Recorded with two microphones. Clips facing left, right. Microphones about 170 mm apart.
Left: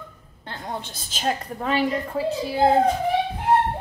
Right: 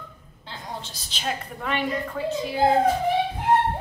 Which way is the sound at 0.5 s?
55° left (ahead or behind).